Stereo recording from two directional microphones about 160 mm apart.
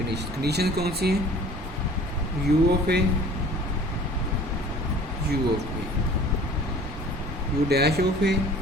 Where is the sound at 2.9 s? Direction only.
90° right.